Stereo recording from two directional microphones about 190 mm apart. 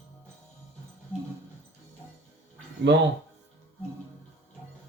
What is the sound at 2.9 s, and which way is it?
Speech, 70° right (ahead or behind).